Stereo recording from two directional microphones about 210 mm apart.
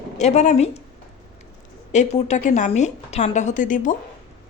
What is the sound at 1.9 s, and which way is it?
A woman's voice, 35° left (ahead or behind).